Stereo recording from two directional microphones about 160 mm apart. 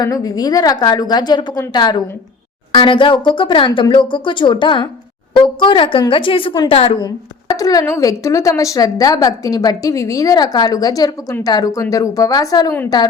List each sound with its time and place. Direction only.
0.0 s a woman's voice: 25° left (ahead or behind)
7.5 s a woman's voice: 25° left (ahead or behind)